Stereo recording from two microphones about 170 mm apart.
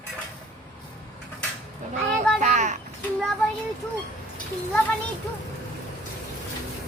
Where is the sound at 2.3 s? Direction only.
45° right (ahead or behind).